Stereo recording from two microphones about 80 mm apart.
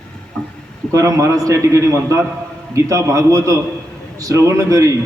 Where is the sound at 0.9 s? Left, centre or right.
Right.